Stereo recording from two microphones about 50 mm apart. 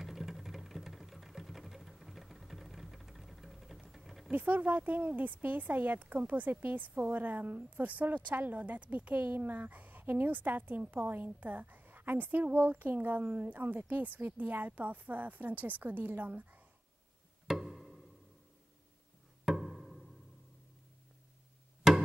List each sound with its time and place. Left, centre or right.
0.0 s sewing machine: centre
4.3 s speech: right
17.5 s music: centre
19.4 s music: centre